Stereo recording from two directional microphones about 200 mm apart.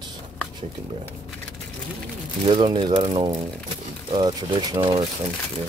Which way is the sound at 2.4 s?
25° right (ahead or behind).